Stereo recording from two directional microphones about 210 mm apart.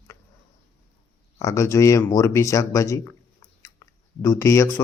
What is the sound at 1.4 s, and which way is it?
Speech, 15° left (ahead or behind).